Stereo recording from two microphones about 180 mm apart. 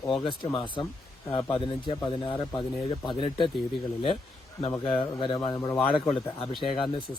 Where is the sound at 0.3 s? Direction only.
25° left (ahead or behind).